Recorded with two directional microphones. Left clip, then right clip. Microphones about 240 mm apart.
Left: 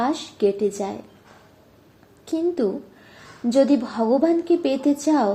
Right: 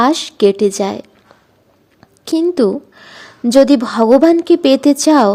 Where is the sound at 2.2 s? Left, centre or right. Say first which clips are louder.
Right 9 dB; right.